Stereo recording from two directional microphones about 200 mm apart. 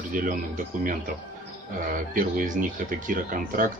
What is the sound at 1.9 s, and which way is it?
Speech, 45° right (ahead or behind).